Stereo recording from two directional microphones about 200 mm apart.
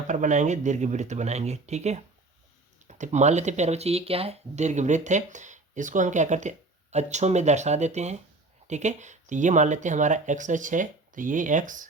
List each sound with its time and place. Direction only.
0.1 s speech: 40° right (ahead or behind)